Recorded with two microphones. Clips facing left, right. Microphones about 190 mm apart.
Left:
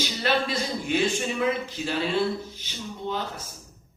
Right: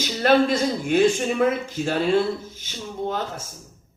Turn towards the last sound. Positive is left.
turn(degrees=-45)  # may be behind; listen again after turning